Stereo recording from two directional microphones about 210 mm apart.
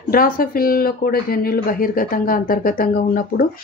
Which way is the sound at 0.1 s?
45° left (ahead or behind).